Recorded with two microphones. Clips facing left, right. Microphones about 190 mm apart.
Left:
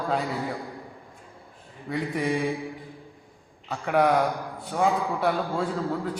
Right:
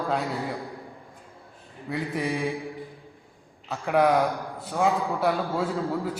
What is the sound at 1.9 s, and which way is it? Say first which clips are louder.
Speech: left 2 dB; centre (ahead or behind).